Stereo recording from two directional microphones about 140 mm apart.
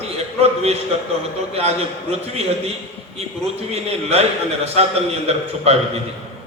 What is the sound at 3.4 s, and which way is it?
A man's voice, 50° right (ahead or behind).